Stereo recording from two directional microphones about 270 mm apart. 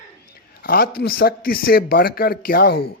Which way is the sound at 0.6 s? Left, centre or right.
Left.